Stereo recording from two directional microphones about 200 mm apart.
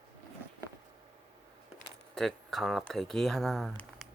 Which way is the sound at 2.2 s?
Centre (ahead or behind).